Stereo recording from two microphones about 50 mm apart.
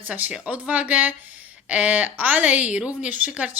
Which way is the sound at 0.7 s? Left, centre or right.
Right.